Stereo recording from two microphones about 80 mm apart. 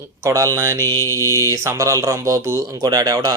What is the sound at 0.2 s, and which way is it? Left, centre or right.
Mantra, right.